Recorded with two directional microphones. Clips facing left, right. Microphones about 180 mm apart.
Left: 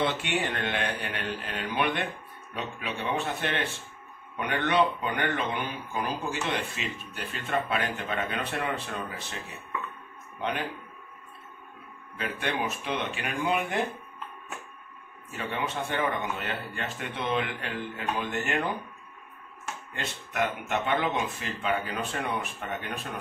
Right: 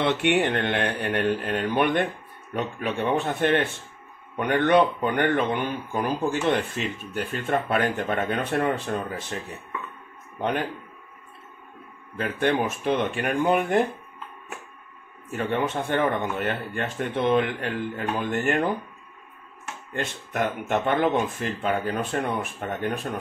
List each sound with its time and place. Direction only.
0.0 s speech: 60° right (ahead or behind)
4.6 s speech: 55° right (ahead or behind)
12.2 s speech: 50° right (ahead or behind)
15.3 s speech: 55° right (ahead or behind)
19.9 s speech: 50° right (ahead or behind)